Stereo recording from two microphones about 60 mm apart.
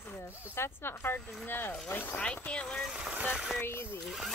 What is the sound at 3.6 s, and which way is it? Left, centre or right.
Speech, left.